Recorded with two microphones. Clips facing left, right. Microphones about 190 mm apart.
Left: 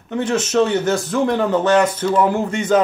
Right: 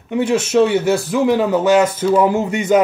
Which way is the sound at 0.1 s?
10° right (ahead or behind).